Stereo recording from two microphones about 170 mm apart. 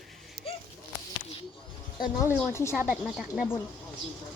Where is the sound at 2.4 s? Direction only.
15° left (ahead or behind).